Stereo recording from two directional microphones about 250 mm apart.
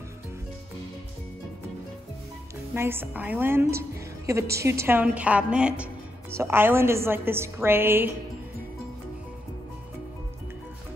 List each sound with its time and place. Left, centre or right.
2.7 s a woman's voice: centre